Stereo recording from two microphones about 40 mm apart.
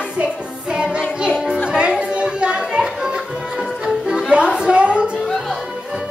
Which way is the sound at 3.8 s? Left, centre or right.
Right.